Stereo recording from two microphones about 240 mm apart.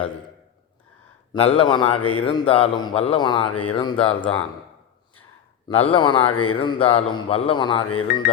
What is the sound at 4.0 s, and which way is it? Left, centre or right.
Speech, centre.